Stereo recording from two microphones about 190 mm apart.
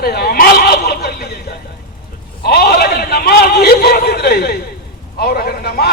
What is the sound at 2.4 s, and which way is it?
A man's voice, 55° left (ahead or behind).